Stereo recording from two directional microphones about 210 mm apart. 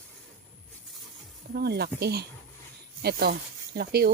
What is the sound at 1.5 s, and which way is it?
Speech, 50° right (ahead or behind).